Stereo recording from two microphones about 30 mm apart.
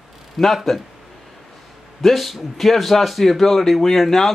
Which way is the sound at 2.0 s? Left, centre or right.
Centre.